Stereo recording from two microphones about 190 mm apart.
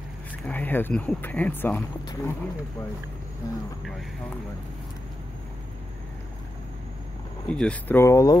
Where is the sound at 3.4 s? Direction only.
15° left (ahead or behind).